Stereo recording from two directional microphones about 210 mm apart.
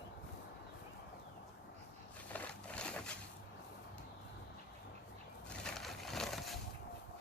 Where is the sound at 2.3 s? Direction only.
5° left (ahead or behind).